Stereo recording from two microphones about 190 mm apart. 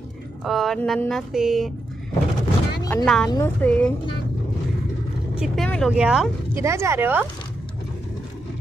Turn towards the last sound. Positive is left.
turn(degrees=-10)  # may be behind; listen again after turning